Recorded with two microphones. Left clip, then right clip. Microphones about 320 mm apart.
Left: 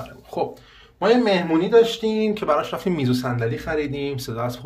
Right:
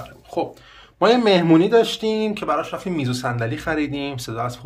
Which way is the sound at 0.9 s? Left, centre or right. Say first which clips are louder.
Right 2 dB; centre.